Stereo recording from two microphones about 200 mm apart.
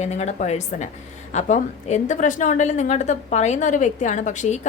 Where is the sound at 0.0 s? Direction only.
35° left (ahead or behind).